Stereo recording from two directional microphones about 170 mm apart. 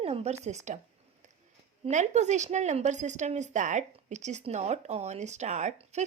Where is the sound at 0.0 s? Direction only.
35° right (ahead or behind).